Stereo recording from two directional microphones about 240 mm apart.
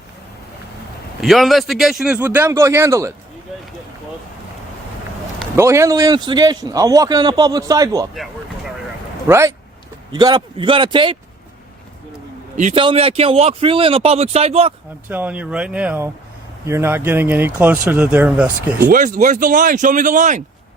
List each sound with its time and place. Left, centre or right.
1.2 s a man's voice: centre
5.5 s a man's voice: centre
9.2 s speech: centre
12.5 s speech: right
15.1 s a man's voice: centre
18.9 s speech: right